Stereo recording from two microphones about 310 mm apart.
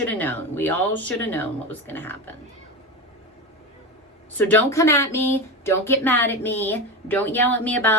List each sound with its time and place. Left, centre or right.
0.0 s speech: centre
4.4 s speech: centre